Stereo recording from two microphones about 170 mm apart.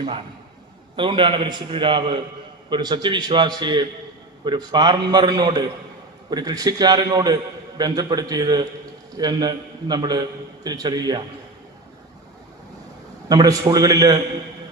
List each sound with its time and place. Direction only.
0.9 s a man's voice: 30° right (ahead or behind)
13.2 s a man's voice: 20° right (ahead or behind)